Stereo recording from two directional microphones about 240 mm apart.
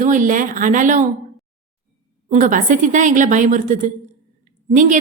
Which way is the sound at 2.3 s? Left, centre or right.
Right.